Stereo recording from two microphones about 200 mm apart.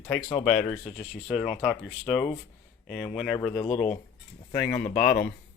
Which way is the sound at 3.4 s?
25° left (ahead or behind).